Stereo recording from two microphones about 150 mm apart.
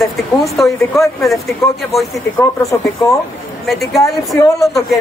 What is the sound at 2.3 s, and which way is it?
Speech, 20° left (ahead or behind).